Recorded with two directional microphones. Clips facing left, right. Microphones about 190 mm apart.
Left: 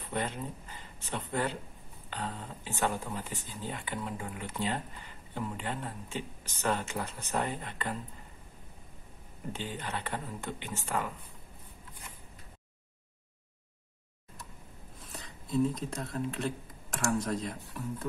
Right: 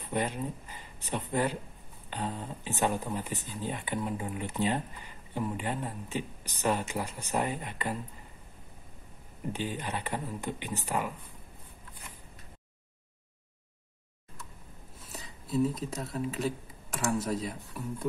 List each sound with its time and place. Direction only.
0.1 s speech: 15° right (ahead or behind)
9.5 s speech: 15° right (ahead or behind)
15.0 s speech: 5° right (ahead or behind)